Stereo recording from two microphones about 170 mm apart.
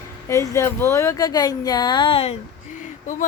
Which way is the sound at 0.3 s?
15° left (ahead or behind).